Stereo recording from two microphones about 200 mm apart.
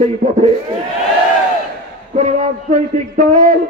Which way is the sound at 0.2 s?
45° right (ahead or behind).